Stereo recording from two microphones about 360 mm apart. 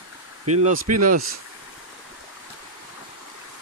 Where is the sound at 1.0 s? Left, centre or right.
Right.